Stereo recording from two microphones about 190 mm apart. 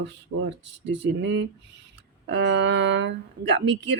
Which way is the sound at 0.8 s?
65° right (ahead or behind).